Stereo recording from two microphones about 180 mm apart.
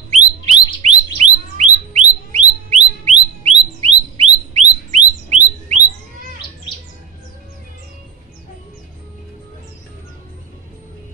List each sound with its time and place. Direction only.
0.1 s bird: 35° right (ahead or behind)